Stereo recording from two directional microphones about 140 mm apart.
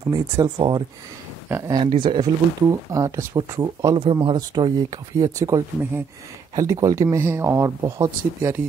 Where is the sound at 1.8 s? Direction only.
35° right (ahead or behind).